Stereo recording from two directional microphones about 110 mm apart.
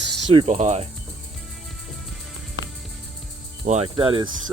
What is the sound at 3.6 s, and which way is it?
Speech, 90° right.